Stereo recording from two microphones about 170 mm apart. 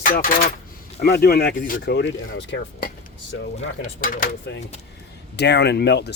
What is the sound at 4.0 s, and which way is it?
Speech, 55° left (ahead or behind).